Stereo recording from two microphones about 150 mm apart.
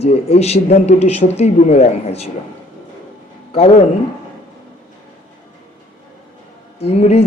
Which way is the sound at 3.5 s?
45° left (ahead or behind).